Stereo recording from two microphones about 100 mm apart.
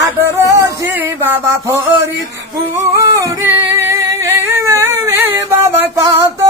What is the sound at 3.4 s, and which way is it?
Singing, 20° right (ahead or behind).